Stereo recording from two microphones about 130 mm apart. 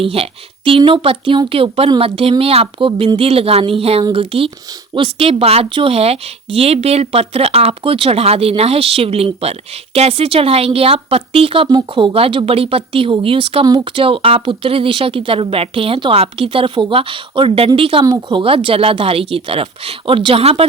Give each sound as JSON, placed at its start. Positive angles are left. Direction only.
{"t": 0.0, "sound": "speech", "side_deg": -45}
{"t": 18.0, "sound": "speech", "side_deg": -35}